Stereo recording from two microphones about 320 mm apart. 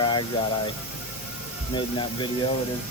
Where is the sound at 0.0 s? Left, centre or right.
Centre.